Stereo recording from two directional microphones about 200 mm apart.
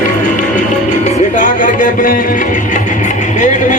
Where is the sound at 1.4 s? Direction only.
40° left (ahead or behind).